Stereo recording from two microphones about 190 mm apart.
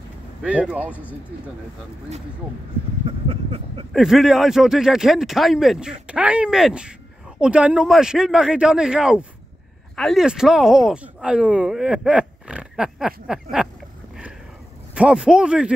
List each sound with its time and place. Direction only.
0.4 s speech: 5° right (ahead or behind)
3.1 s a sound: 30° right (ahead or behind)
3.9 s speech: centre (ahead or behind)
15.0 s speech: 5° right (ahead or behind)